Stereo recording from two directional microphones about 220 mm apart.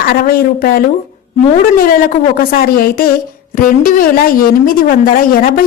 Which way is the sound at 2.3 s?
45° left (ahead or behind).